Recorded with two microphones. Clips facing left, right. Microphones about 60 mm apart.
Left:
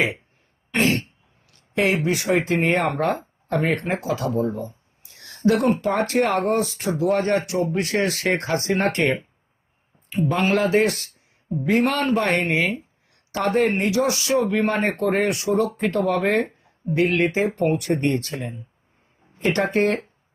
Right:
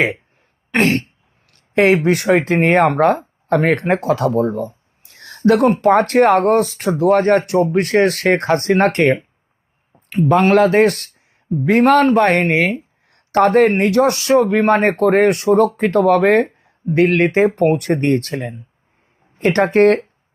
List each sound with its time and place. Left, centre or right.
0.7 s speech: right